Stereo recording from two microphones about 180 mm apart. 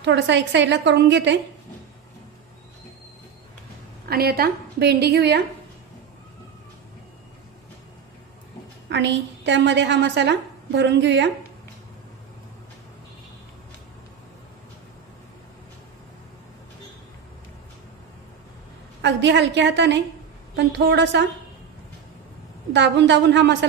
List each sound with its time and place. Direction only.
0.0 s a woman's voice: 75° right (ahead or behind)
4.1 s a woman's voice: 60° right (ahead or behind)
8.8 s a woman's voice: 75° right (ahead or behind)
18.9 s a woman's voice: 70° right (ahead or behind)
22.7 s a woman's voice: 75° right (ahead or behind)